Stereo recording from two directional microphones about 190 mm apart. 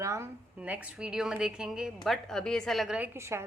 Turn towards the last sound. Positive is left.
turn(degrees=-15)  # may be behind; listen again after turning